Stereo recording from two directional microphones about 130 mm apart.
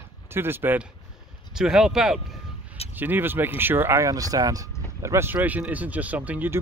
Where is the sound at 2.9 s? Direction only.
15° right (ahead or behind).